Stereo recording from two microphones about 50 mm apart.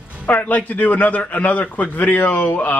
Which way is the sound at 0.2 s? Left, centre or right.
Left.